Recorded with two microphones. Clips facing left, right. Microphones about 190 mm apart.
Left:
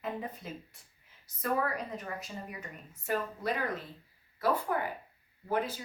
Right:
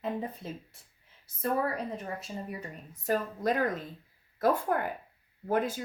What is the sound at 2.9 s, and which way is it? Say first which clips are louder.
A woman's voice: right 3 dB; 40° right (ahead or behind).